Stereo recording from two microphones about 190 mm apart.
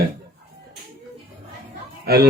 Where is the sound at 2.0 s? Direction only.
55° right (ahead or behind).